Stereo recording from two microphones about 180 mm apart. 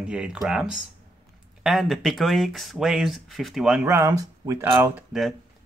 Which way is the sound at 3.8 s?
15° right (ahead or behind).